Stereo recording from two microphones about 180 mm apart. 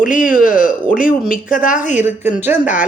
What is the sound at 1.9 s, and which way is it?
Speech, 10° right (ahead or behind).